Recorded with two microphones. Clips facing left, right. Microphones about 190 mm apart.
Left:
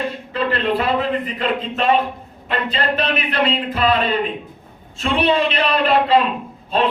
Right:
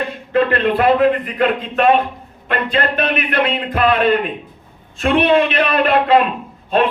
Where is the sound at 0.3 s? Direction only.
55° right (ahead or behind).